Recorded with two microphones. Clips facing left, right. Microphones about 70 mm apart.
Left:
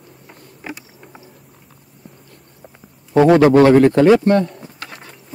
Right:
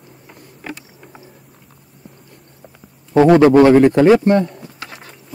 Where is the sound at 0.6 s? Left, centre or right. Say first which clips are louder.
Even; centre.